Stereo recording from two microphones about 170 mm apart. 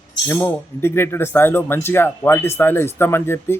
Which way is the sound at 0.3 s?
15° left (ahead or behind).